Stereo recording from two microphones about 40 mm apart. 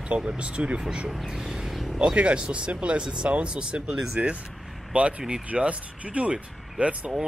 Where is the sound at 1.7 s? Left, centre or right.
Centre.